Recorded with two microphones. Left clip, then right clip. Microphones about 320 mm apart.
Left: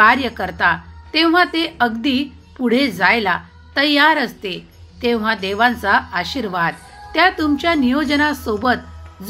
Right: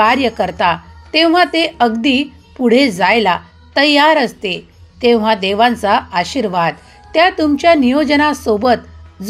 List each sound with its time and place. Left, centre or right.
0.0 s a woman's voice: right